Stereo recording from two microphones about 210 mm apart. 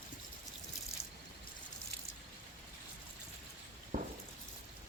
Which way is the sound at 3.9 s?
45° right (ahead or behind).